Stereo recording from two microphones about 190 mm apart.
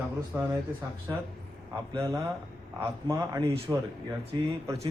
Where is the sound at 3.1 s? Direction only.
20° right (ahead or behind).